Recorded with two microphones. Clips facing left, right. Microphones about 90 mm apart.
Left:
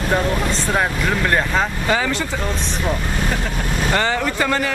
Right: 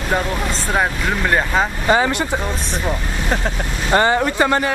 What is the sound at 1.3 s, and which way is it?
Speech, 10° right (ahead or behind).